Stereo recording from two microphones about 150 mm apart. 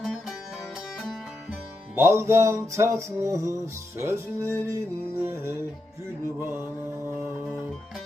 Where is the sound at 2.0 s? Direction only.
20° right (ahead or behind).